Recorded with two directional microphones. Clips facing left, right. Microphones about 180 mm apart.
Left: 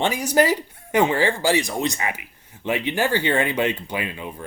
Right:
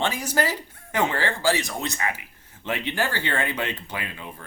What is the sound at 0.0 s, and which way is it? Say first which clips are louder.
Speech: left 6 dB; 15° left (ahead or behind).